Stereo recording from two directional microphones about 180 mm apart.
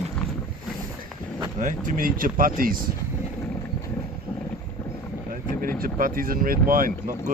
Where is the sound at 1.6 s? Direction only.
45° right (ahead or behind).